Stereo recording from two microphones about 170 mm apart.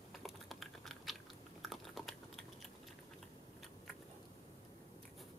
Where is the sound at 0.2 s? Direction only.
Centre (ahead or behind).